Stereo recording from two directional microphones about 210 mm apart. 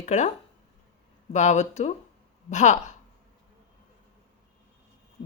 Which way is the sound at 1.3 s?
35° left (ahead or behind).